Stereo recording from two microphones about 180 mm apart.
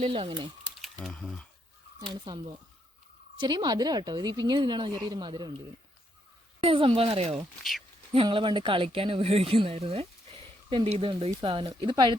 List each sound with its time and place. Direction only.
0.0 s a woman's voice: 30° right (ahead or behind)
0.8 s speech: centre (ahead or behind)
2.3 s a woman's voice: 25° right (ahead or behind)
3.4 s a woman's voice: 20° right (ahead or behind)
6.6 s a woman's voice: 30° right (ahead or behind)